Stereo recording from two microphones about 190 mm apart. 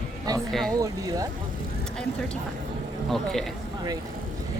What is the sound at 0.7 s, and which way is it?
Speech, 20° right (ahead or behind).